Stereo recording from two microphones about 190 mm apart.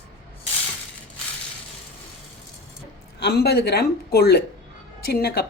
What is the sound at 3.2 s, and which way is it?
Speech, 60° left (ahead or behind).